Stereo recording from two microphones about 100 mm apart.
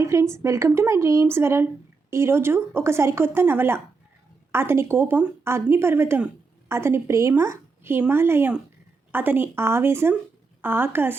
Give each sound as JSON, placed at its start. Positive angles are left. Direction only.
{"t": 0.0, "sound": "speech", "side_deg": -30}